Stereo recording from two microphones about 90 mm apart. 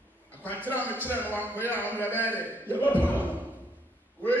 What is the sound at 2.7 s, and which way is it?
Speech, 20° left (ahead or behind).